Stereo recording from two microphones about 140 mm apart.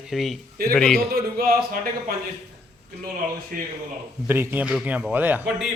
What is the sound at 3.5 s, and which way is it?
Speech, 85° right.